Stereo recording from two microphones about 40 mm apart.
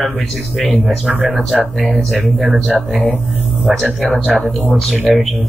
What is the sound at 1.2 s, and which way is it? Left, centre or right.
Speech, centre.